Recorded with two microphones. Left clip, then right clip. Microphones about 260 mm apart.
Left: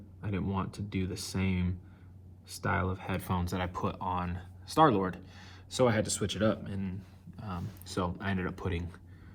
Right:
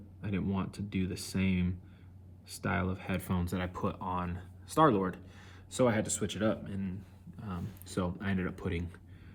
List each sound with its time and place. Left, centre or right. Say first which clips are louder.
0.2 s speech: left 1 dB; centre
7.3 s a sound: left 3 dB; left
8.0 s speech: left 2 dB; centre